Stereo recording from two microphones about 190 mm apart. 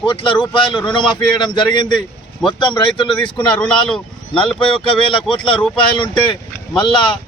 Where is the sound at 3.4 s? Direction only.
5° left (ahead or behind).